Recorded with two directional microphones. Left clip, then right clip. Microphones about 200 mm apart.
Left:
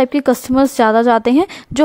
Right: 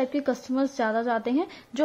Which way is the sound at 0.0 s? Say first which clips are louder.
Left 12 dB; 55° left (ahead or behind).